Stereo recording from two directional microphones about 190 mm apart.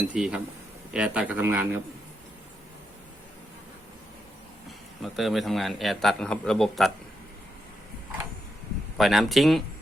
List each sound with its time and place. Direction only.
0.1 s a man's voice: 5° right (ahead or behind)
5.0 s a man's voice: centre (ahead or behind)
9.0 s a man's voice: centre (ahead or behind)